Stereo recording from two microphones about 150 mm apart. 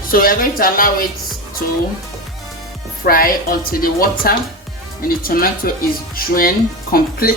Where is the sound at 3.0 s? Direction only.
75° left (ahead or behind).